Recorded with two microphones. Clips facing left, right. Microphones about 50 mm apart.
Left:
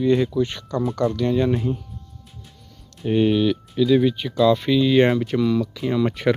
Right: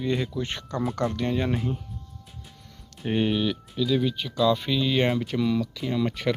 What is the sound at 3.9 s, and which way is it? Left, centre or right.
Speech, left.